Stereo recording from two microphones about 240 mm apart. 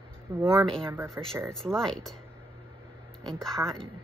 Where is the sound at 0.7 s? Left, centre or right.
Right.